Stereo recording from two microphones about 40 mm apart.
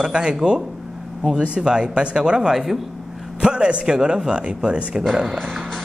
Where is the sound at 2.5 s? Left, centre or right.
Centre.